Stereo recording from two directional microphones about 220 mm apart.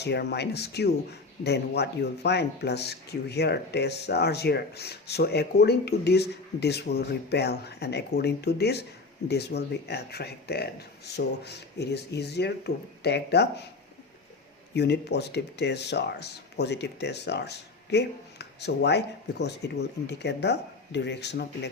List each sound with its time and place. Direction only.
0.0 s speech: 50° left (ahead or behind)
14.7 s speech: 50° left (ahead or behind)